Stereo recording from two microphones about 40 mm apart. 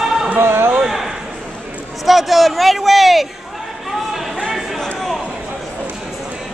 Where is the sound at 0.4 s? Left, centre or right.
Right.